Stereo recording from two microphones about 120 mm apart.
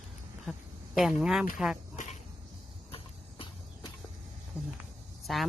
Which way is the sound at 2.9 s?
50° left (ahead or behind).